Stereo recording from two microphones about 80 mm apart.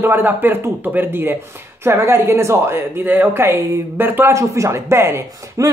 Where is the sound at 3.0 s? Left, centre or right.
Right.